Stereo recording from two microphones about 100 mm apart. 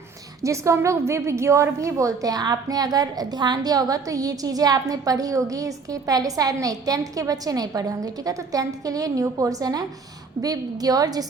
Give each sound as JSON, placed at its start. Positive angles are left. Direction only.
{"t": 0.4, "sound": "a woman's voice", "side_deg": -30}